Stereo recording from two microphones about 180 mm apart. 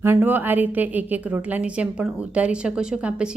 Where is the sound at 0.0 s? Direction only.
10° right (ahead or behind).